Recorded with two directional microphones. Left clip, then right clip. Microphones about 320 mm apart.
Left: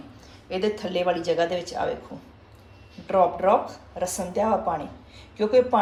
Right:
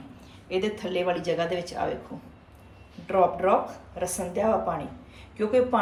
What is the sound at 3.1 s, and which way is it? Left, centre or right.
Speech, centre.